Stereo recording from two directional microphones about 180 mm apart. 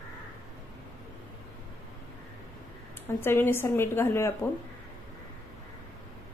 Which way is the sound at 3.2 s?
15° left (ahead or behind).